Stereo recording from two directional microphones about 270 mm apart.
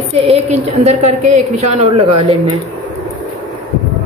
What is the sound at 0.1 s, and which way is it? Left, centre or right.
A woman's voice, right.